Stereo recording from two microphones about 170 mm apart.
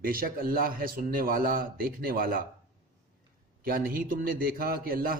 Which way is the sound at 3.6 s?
60° right (ahead or behind).